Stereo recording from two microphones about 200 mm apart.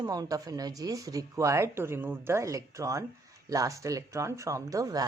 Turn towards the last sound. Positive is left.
turn(degrees=-20)  # may be behind; listen again after turning